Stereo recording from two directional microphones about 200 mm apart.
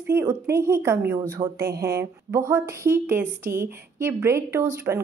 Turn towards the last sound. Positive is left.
turn(degrees=-15)  # may be behind; listen again after turning